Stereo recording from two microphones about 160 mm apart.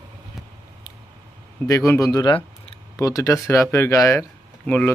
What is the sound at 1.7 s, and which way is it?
Speech, 20° left (ahead or behind).